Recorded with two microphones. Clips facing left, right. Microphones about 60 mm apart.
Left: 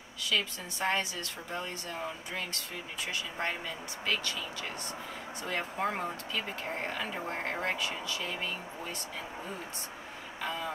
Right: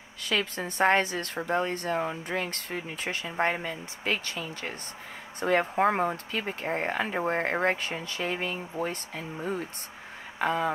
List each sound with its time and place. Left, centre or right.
0.2 s a woman's voice: right
10.4 s a man's voice: right